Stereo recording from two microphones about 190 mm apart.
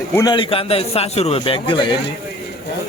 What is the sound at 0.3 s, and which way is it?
A man's voice, 30° left (ahead or behind).